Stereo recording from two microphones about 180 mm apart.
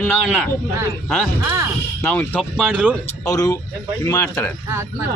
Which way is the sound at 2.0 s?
10° left (ahead or behind).